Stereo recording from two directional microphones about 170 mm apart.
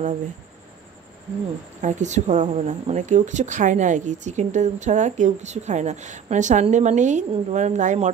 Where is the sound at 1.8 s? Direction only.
45° right (ahead or behind).